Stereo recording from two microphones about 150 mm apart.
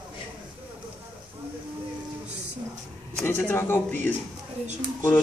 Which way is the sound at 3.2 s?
15° left (ahead or behind).